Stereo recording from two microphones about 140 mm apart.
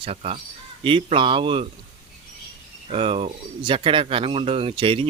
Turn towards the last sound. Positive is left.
turn(degrees=-40)  # may be behind; listen again after turning